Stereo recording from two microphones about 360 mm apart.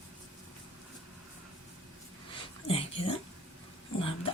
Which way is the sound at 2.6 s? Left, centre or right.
Centre.